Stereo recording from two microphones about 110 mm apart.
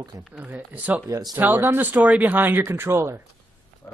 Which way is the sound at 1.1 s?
40° right (ahead or behind).